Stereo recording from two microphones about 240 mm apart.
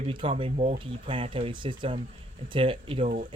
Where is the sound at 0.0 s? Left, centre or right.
Right.